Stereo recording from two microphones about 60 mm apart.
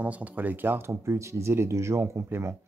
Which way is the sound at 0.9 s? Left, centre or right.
Right.